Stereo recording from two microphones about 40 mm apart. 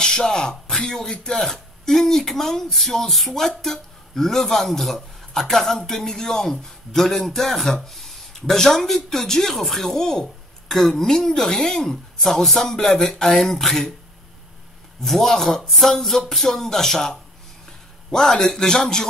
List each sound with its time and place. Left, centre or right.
0.0 s speech: centre
15.0 s speech: centre
15.7 s a sound: centre
16.3 s speech: centre